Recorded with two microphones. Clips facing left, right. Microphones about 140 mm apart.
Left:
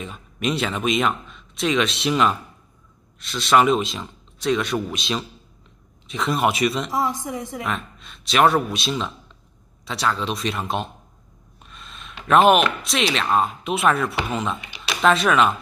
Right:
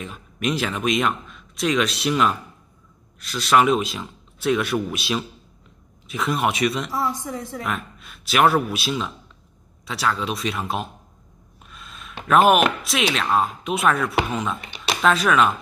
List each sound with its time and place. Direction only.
0.0 s speech: centre (ahead or behind)
6.9 s a woman's voice: 15° left (ahead or behind)
7.6 s speech: 5° right (ahead or behind)
11.6 s a sound: 5° right (ahead or behind)
12.8 s speech: 5° right (ahead or behind)